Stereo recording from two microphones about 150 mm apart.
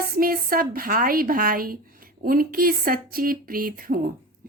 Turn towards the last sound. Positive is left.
turn(degrees=-70)  # may be behind; listen again after turning